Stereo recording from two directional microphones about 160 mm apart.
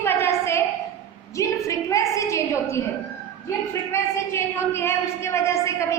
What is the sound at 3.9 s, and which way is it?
A woman's voice, 15° left (ahead or behind).